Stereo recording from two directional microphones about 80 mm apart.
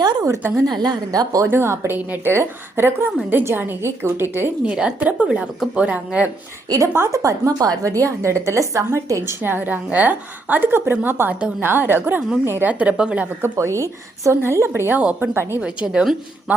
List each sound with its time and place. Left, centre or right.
0.0 s a sound: right
0.7 s a woman's voice: right
1.5 s a woman's voice: right
4.6 s a woman's voice: centre
6.7 s a woman's voice: right
6.9 s a woman's voice: right
9.4 s a woman's voice: right
12.8 s a woman's voice: centre
13.4 s a woman's voice: right
15.6 s a woman's voice: centre